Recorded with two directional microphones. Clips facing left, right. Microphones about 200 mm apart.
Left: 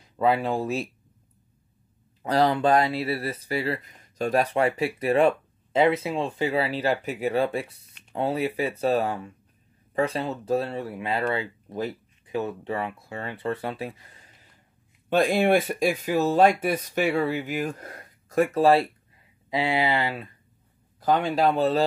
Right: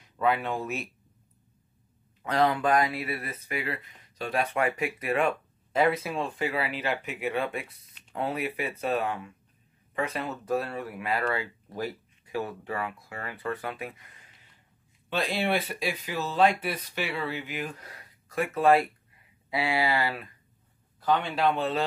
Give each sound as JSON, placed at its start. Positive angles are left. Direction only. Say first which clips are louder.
{"t": 0.0, "sound": "speech", "louder": "left 4 dB", "side_deg": 30}
{"t": 2.2, "sound": "speech", "louder": "left 4 dB", "side_deg": 30}
{"t": 15.0, "sound": "speech", "louder": "left 8 dB", "side_deg": 50}
{"t": 19.5, "sound": "speech", "louder": "left 3 dB", "side_deg": 20}
{"t": 21.0, "sound": "speech", "louder": "left 4 dB", "side_deg": 40}